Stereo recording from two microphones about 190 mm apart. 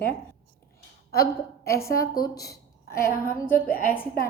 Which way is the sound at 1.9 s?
50° left (ahead or behind).